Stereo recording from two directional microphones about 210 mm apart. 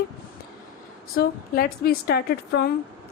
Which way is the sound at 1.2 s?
45° left (ahead or behind).